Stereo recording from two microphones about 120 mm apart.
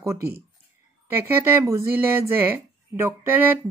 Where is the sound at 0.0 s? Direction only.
25° right (ahead or behind).